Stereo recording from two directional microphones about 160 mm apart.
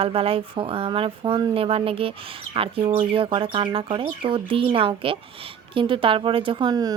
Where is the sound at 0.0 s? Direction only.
35° right (ahead or behind).